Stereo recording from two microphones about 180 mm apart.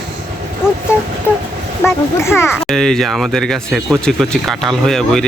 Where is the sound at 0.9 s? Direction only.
15° left (ahead or behind).